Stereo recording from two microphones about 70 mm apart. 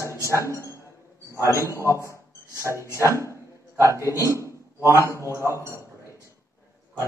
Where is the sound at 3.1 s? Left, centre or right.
Left.